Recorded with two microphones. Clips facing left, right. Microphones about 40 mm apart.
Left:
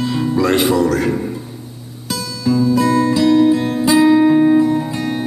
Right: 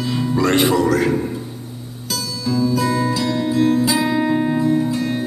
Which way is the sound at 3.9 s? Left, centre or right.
Centre.